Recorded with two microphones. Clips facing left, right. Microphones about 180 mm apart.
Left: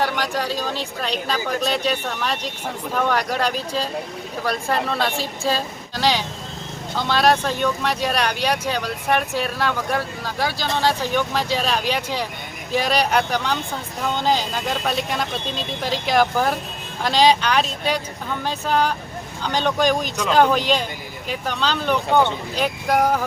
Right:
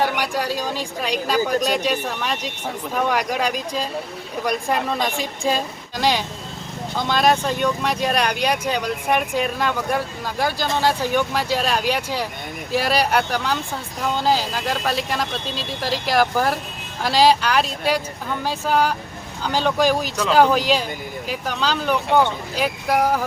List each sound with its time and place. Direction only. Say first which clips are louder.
0.0 s speech: right 1 dB; 10° right (ahead or behind)